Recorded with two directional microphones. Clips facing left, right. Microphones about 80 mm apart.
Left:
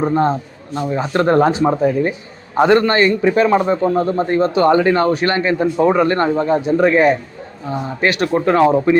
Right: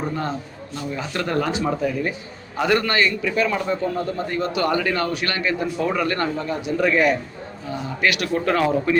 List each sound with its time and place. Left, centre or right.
0.0 s a man's voice: left